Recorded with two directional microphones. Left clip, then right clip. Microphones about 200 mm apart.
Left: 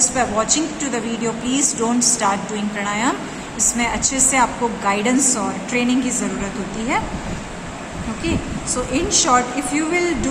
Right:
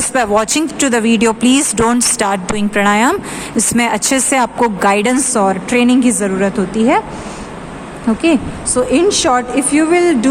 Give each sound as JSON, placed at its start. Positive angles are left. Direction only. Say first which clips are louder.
{"t": 0.1, "sound": "a woman's voice", "louder": "right 6 dB", "side_deg": -60}
{"t": 8.2, "sound": "a woman's voice", "louder": "right 10 dB", "side_deg": -45}